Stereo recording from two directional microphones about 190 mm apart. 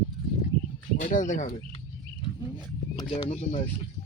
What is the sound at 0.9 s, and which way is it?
Speech, 40° left (ahead or behind).